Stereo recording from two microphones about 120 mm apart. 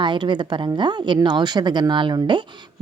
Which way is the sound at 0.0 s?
40° right (ahead or behind).